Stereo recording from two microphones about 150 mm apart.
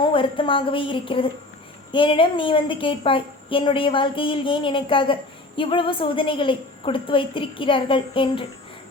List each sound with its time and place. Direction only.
0.0 s a woman's voice: 35° left (ahead or behind)